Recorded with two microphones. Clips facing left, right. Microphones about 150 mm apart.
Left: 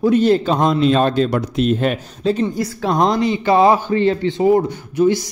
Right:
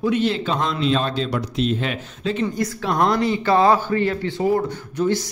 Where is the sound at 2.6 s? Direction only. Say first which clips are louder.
Left 3 dB; 30° left (ahead or behind).